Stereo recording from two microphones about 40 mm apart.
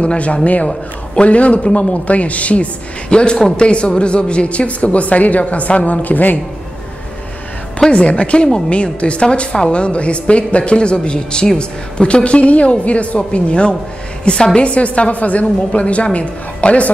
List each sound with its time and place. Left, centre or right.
0.0 s a woman's voice: left
3.1 s a woman's voice: left
7.9 s a woman's voice: left
14.7 s a woman's voice: left